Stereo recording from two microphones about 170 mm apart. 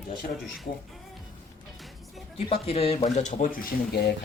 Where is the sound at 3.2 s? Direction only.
50° left (ahead or behind).